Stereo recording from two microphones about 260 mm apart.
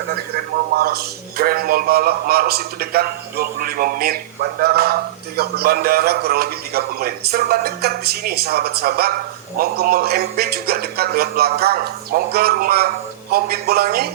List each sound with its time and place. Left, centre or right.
0.8 s a man's voice: right